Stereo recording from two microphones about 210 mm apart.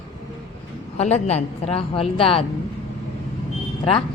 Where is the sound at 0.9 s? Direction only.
30° left (ahead or behind).